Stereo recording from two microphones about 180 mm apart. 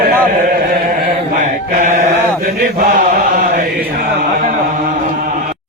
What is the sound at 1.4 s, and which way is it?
Chant, 45° right (ahead or behind).